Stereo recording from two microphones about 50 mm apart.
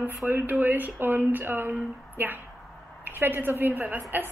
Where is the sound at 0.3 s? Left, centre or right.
Right.